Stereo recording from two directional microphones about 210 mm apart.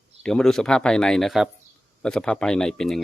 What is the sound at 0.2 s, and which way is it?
Speech, 5° left (ahead or behind).